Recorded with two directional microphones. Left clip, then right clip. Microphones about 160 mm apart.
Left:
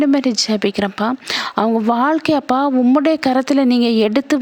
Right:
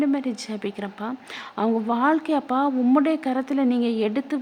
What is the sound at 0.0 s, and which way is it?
A woman's voice, 35° left (ahead or behind).